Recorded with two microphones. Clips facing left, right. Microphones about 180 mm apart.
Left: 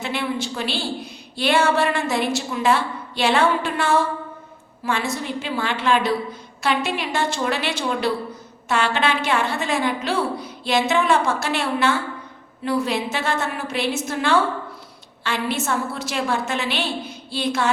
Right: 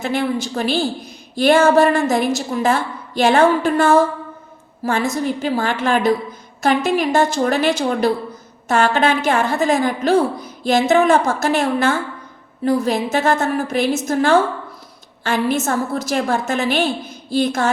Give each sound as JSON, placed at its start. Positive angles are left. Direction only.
{"t": 0.0, "sound": "a woman's voice", "side_deg": -45}